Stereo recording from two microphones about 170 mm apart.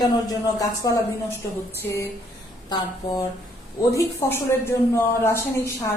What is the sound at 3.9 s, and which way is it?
Speech, 15° left (ahead or behind).